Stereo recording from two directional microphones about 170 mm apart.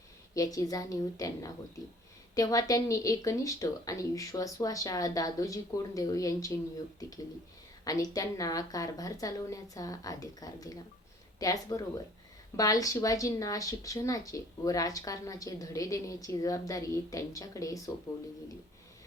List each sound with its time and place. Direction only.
0.3 s speech: 20° left (ahead or behind)
7.9 s speech: 20° left (ahead or behind)